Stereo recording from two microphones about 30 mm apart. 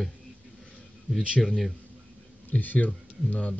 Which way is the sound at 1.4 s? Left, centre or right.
Centre.